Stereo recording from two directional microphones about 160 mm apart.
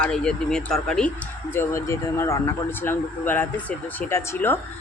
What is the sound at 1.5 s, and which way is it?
Speech, 15° left (ahead or behind).